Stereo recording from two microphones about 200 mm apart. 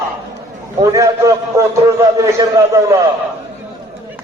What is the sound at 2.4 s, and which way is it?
Speech, 15° right (ahead or behind).